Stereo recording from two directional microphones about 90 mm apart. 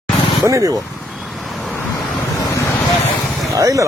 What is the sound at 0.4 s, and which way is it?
Speech, 40° right (ahead or behind).